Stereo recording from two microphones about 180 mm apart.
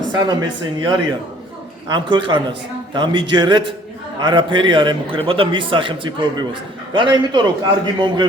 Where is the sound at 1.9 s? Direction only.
25° right (ahead or behind).